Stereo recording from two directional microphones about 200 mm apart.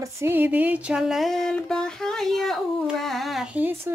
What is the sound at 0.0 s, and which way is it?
Music, 10° right (ahead or behind).